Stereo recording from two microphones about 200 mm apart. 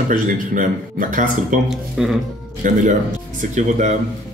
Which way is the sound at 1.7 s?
Centre (ahead or behind).